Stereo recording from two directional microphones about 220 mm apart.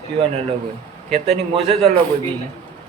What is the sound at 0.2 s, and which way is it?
A man's voice, 30° right (ahead or behind).